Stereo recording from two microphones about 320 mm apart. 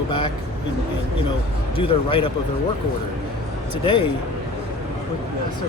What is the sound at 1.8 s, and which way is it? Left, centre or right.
Speech, centre.